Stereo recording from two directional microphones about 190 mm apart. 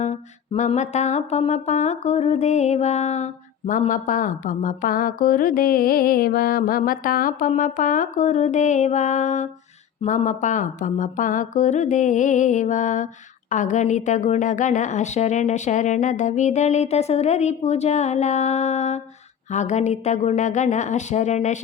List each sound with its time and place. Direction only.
0.0 s music: 40° left (ahead or behind)